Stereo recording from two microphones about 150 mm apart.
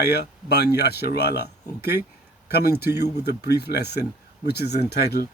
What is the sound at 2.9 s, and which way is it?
Speech, 90° left.